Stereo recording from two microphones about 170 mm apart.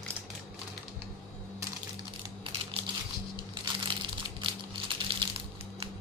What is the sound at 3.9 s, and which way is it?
Crumpling, 30° right (ahead or behind).